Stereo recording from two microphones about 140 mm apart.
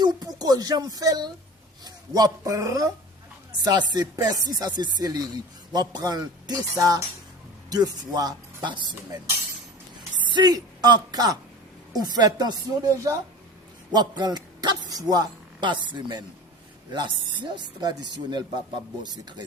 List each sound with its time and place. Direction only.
0.0 s speech: 30° right (ahead or behind)
10.2 s a woman's voice: 30° right (ahead or behind)